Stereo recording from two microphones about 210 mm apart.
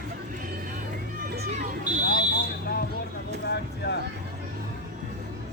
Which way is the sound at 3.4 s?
55° left (ahead or behind).